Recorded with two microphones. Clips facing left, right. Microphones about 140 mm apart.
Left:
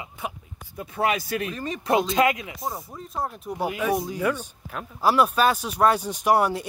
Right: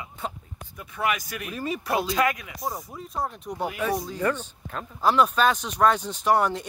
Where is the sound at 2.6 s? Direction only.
Centre (ahead or behind).